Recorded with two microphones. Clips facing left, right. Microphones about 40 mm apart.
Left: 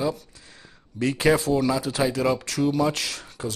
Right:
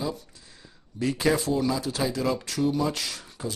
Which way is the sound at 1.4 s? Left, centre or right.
Centre.